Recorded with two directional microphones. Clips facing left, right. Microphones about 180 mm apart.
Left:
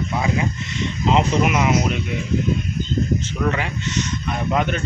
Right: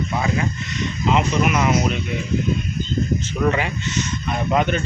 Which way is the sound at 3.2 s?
10° right (ahead or behind).